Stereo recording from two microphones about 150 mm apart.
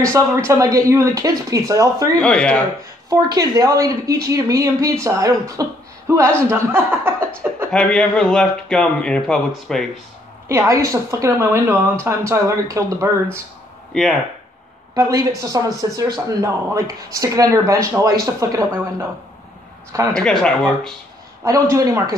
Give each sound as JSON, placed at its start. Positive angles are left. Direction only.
{"t": 0.2, "sound": "speech", "side_deg": -20}
{"t": 2.1, "sound": "speech", "side_deg": 5}
{"t": 3.1, "sound": "speech", "side_deg": -25}
{"t": 7.7, "sound": "speech", "side_deg": 5}
{"t": 10.5, "sound": "speech", "side_deg": -20}
{"t": 15.0, "sound": "speech", "side_deg": -25}
{"t": 20.1, "sound": "speech", "side_deg": 5}
{"t": 21.5, "sound": "speech", "side_deg": -20}